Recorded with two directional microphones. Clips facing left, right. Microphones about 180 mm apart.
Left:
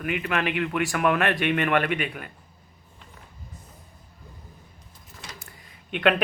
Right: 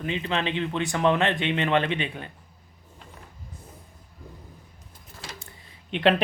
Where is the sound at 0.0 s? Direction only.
25° right (ahead or behind).